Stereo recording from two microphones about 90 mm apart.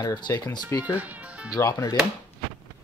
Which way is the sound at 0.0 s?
50° left (ahead or behind).